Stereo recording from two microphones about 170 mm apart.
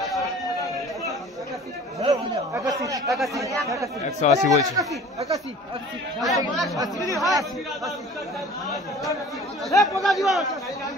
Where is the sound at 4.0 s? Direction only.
45° left (ahead or behind).